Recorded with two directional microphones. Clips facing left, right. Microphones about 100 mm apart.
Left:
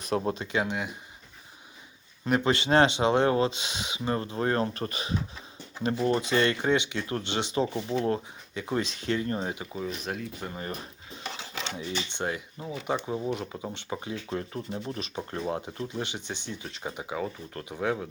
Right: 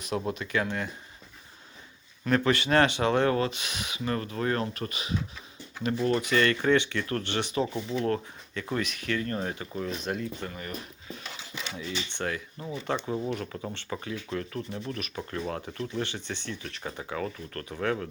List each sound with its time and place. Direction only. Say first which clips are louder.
0.3 s speech: left 1 dB; 25° left (ahead or behind)
2.2 s speech: even; 20° left (ahead or behind)
6.0 s speech: even; 25° left (ahead or behind)
8.0 s speech: even; 20° left (ahead or behind); by 10.2 s centre (ahead or behind)
10.4 s speech: left 1 dB; 25° left (ahead or behind)
11.8 s speech: even; 20° left (ahead or behind)